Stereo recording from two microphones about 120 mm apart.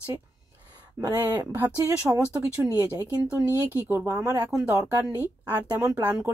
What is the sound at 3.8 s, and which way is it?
Speech, 20° right (ahead or behind).